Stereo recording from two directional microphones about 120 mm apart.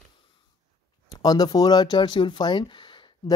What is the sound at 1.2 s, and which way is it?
Speech, 35° left (ahead or behind).